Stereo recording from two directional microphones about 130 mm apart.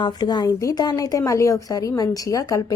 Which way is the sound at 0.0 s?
30° left (ahead or behind).